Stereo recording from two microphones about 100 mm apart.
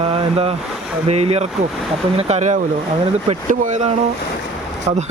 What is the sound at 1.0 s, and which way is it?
Speech, 90° right.